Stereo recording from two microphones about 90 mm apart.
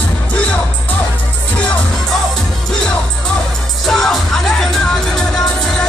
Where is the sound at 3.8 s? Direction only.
5° left (ahead or behind).